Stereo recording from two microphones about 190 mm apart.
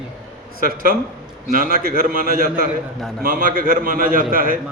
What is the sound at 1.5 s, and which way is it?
A man's voice, 50° right (ahead or behind).